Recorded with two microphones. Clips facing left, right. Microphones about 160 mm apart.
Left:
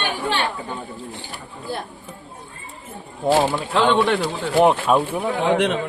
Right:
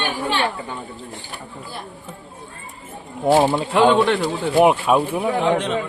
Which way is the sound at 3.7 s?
15° right (ahead or behind).